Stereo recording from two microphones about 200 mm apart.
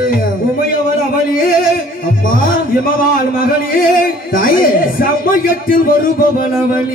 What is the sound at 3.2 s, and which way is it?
Speech, 45° left (ahead or behind).